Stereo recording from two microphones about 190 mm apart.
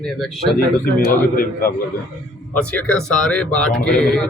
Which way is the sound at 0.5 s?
50° left (ahead or behind).